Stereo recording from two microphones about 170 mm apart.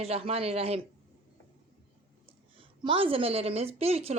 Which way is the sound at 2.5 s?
30° right (ahead or behind).